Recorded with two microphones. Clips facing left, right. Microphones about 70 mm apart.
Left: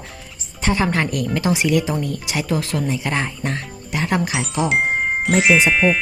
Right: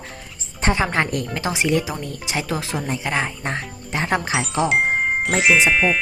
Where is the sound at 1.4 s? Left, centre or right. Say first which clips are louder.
Left 2 dB; right.